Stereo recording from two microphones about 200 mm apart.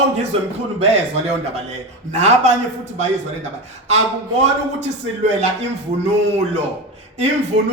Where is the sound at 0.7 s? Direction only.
30° right (ahead or behind).